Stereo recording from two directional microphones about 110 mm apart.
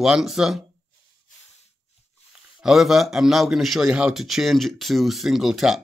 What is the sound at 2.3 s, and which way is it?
A man's voice, 5° right (ahead or behind).